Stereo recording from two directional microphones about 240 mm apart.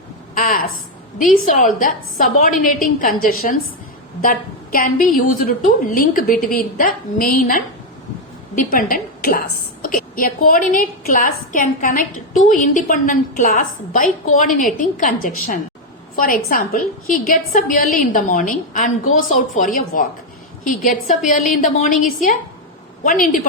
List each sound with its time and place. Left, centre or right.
0.3 s a woman's voice: left